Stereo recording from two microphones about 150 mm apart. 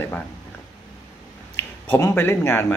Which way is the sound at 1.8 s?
15° left (ahead or behind).